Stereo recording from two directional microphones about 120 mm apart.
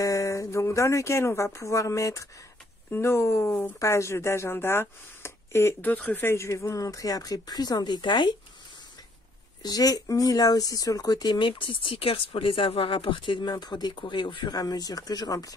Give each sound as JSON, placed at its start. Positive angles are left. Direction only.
{"t": 0.0, "sound": "speech", "side_deg": 25}
{"t": 9.6, "sound": "speech", "side_deg": 30}